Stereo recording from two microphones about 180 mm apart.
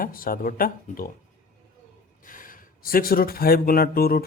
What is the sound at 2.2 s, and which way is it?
Speech, 50° left (ahead or behind).